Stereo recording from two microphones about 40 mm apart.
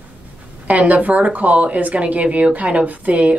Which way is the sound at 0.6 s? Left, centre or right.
Right.